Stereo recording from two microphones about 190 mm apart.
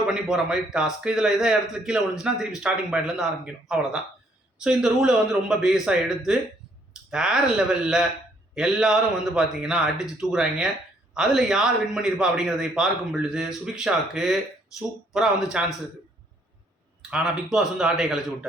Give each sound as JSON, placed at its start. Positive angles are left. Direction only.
{"t": 0.1, "sound": "a man's voice", "side_deg": 0}
{"t": 17.0, "sound": "a man's voice", "side_deg": -5}